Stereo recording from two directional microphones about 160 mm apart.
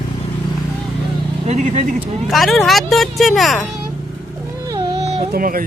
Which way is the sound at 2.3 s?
Centre (ahead or behind).